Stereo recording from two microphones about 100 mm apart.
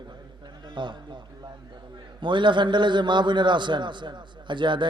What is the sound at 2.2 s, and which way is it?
A man's voice, 55° right (ahead or behind).